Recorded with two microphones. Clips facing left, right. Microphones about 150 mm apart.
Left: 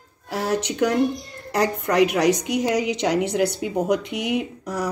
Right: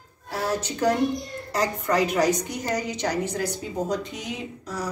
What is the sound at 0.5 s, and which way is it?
A woman's voice, 75° left (ahead or behind).